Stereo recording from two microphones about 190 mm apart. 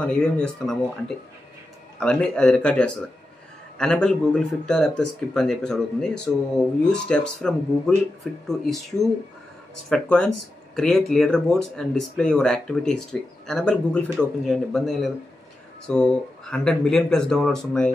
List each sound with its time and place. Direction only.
0.0 s speech: 5° left (ahead or behind)